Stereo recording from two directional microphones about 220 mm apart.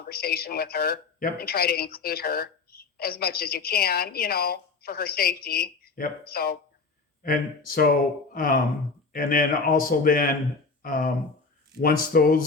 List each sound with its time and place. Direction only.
0.0 s a woman's voice: 45° left (ahead or behind)